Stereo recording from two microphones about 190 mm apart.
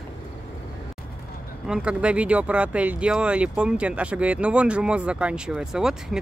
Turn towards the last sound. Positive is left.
turn(degrees=0)  # may be behind; listen again after turning